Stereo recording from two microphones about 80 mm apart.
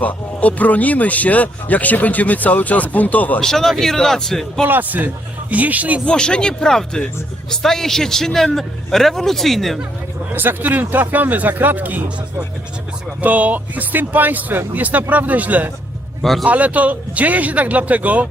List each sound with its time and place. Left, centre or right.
0.0 s speech: centre
3.4 s speech: centre
4.6 s speech: right
6.1 s speech: centre
10.2 s speech: right
16.2 s speech: centre
16.5 s speech: centre